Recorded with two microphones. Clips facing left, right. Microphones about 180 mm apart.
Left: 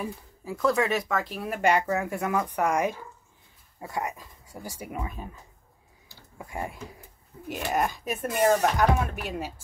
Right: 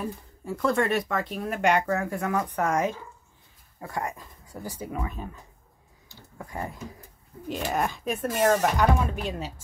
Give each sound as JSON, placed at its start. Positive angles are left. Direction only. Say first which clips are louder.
{"t": 0.0, "sound": "speech", "louder": "right 1 dB", "side_deg": 0}
{"t": 1.9, "sound": "speech", "louder": "even", "side_deg": 15}
{"t": 6.3, "sound": "speech", "louder": "even", "side_deg": 10}